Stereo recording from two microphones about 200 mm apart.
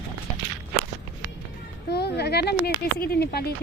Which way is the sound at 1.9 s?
55° left (ahead or behind).